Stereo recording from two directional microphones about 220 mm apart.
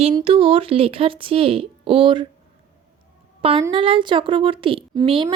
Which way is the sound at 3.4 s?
25° right (ahead or behind).